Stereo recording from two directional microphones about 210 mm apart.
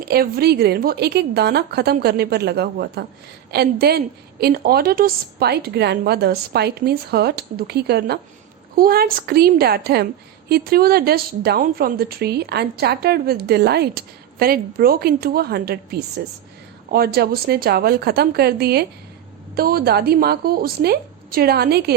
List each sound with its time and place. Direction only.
0.0 s a woman's voice: 45° right (ahead or behind)